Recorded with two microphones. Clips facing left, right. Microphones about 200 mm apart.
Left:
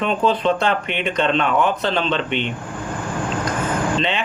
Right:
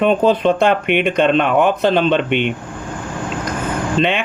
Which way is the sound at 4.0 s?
55° right (ahead or behind).